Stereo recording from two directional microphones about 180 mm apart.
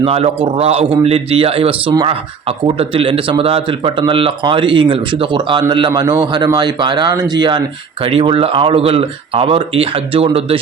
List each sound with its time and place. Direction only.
0.0 s speech: 30° right (ahead or behind)